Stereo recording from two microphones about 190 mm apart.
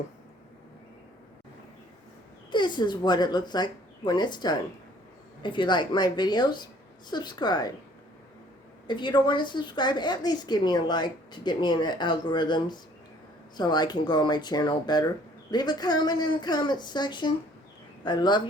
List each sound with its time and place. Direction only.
2.5 s a woman's voice: 25° left (ahead or behind)
8.9 s a woman's voice: 25° left (ahead or behind)